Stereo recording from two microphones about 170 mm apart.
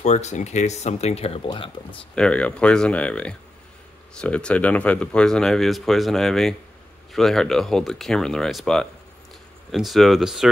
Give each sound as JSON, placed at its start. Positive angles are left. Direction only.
{"t": 0.0, "sound": "speech", "side_deg": 45}
{"t": 2.1, "sound": "speech", "side_deg": 5}